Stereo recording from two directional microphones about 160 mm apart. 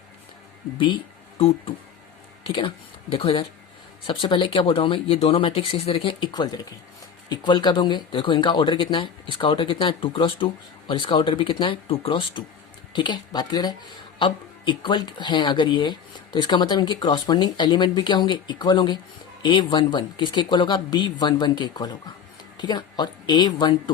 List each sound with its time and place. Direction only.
0.8 s speech: 30° left (ahead or behind)